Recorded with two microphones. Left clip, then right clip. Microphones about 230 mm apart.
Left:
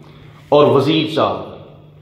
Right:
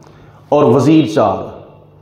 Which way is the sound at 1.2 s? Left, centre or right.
Right.